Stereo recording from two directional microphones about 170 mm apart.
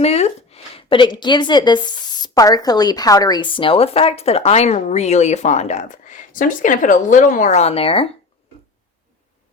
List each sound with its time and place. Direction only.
0.0 s a woman's voice: 40° left (ahead or behind)